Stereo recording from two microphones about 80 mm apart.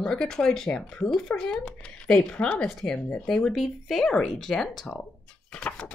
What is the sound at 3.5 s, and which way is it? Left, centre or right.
Speech, centre.